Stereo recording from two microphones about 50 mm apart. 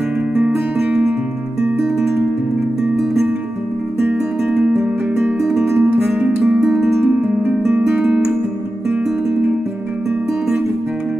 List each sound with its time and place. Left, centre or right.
4.0 s music: right
4.6 s music: centre
6.6 s music: centre
7.0 s music: right
7.4 s music: right